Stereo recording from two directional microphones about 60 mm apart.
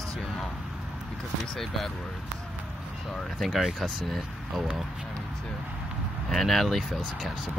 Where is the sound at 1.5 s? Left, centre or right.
Centre.